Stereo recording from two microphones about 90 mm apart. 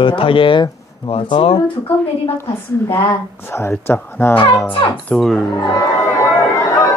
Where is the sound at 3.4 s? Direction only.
30° left (ahead or behind).